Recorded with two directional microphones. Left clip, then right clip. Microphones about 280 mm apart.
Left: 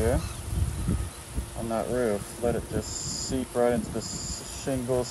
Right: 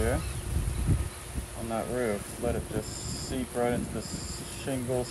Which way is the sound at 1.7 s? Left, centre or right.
Centre.